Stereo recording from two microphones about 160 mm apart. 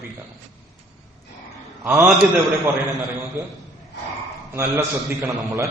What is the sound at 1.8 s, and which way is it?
Speech, 15° right (ahead or behind).